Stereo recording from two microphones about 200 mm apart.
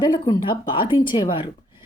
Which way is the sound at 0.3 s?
20° left (ahead or behind).